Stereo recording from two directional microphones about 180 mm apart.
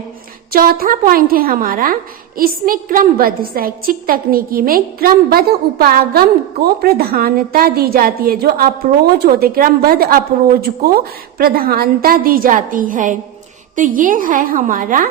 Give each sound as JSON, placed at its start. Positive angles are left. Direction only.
{"t": 0.5, "sound": "a woman's voice", "side_deg": -55}